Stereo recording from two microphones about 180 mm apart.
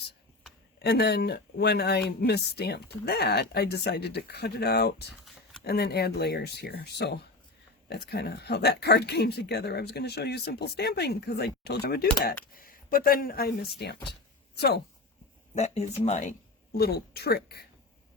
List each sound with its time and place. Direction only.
0.8 s speech: 65° left (ahead or behind)
5.2 s a sound: centre (ahead or behind)
5.6 s speech: 60° left (ahead or behind)
15.5 s speech: 40° left (ahead or behind)
16.7 s speech: 60° left (ahead or behind)